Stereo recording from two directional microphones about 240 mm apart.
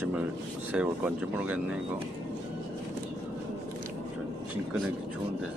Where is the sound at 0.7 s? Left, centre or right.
Centre.